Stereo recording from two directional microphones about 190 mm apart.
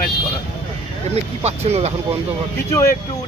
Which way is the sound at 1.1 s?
35° right (ahead or behind).